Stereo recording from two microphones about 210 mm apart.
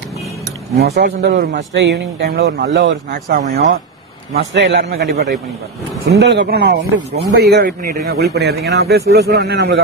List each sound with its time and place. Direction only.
0.7 s a man's voice: 50° right (ahead or behind)